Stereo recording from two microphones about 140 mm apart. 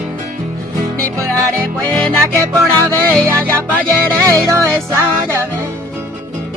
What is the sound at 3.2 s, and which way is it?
Music, 15° right (ahead or behind).